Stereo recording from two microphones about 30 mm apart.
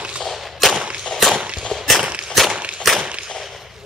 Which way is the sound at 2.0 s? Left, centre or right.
Right.